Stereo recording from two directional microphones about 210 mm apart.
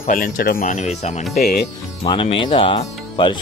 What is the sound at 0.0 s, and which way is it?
Speech, 40° left (ahead or behind).